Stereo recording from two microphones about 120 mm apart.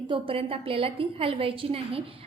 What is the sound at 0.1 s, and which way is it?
A woman's voice, 50° right (ahead or behind).